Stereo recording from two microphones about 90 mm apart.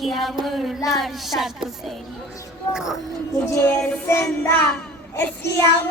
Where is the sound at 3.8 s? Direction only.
15° left (ahead or behind).